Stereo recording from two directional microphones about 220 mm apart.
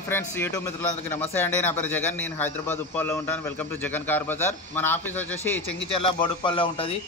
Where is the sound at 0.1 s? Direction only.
10° left (ahead or behind).